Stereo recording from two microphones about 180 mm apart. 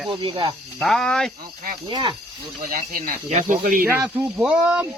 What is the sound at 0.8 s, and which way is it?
Speech, 5° left (ahead or behind).